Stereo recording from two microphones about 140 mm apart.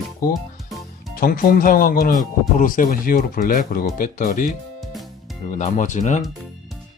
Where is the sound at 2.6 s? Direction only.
75° left (ahead or behind).